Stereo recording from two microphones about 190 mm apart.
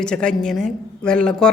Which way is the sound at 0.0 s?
5° left (ahead or behind).